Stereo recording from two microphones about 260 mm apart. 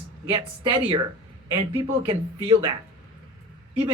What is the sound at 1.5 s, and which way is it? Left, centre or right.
A woman's voice, centre.